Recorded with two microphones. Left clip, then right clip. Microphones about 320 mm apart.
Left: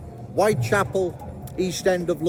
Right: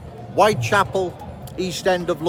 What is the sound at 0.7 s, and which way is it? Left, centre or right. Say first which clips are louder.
Speech: right 3 dB; centre.